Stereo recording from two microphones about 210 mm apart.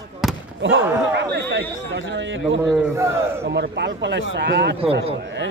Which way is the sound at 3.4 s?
50° right (ahead or behind).